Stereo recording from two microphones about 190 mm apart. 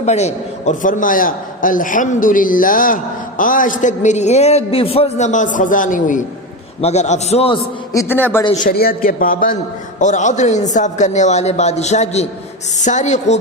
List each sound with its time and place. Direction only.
0.0 s a man's voice: 35° left (ahead or behind)
7.9 s a man's voice: 10° left (ahead or behind)
8.6 s a man's voice: 50° left (ahead or behind)